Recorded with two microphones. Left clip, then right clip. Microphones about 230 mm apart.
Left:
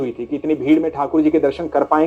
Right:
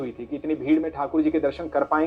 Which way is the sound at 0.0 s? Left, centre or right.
Left.